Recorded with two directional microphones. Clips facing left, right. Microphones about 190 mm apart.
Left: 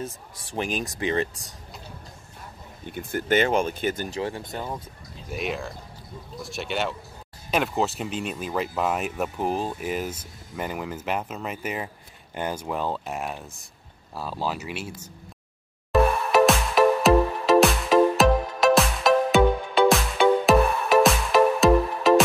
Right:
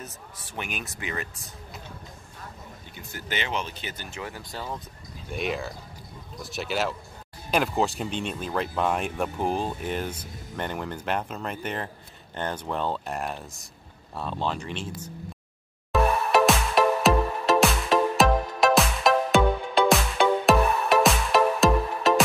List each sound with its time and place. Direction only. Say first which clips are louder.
0.6 s speech: left 7 dB; 35° left (ahead or behind)
2.9 s speech: left 12 dB; 55° left (ahead or behind)
4.2 s speech: left 6 dB; 25° left (ahead or behind)
5.3 s speech: even; centre (ahead or behind)
15.9 s music: left 2 dB; centre (ahead or behind)